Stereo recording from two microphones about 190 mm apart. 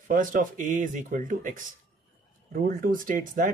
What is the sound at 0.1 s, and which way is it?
Speech, 45° right (ahead or behind).